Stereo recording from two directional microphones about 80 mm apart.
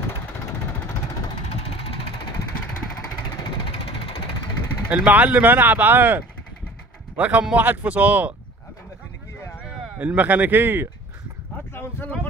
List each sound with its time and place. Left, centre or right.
4.8 s speech: centre
9.9 s speech: right
11.7 s a sound: left